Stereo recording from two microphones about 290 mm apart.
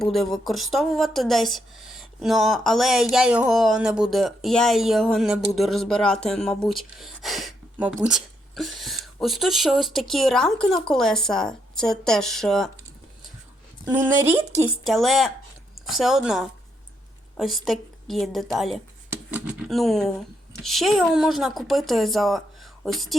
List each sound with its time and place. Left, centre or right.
0.0 s a woman's voice: centre
13.8 s a woman's voice: centre